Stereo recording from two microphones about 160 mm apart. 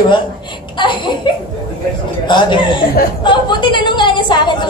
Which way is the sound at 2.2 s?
30° left (ahead or behind).